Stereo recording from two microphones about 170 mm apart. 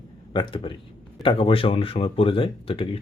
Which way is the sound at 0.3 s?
30° left (ahead or behind).